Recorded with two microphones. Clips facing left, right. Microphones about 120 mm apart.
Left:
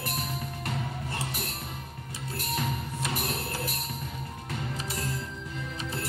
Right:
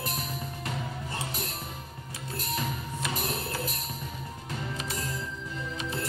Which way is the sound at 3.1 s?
20° right (ahead or behind).